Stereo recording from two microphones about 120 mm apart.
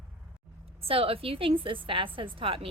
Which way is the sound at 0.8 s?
50° right (ahead or behind).